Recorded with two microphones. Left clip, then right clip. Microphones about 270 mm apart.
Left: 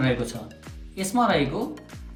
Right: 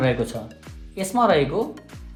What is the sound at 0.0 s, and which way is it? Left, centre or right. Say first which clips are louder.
Speech: right 3 dB; right.